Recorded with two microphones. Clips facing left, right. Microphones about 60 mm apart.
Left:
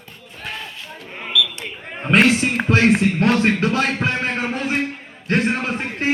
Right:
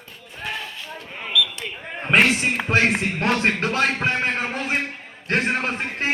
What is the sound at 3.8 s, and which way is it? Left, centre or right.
Music, centre.